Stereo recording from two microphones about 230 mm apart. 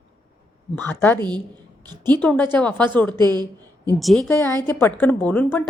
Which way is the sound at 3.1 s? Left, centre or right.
Centre.